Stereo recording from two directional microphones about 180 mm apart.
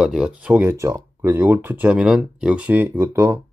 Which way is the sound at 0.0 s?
5° right (ahead or behind).